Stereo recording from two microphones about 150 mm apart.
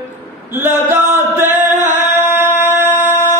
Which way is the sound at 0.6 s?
15° right (ahead or behind).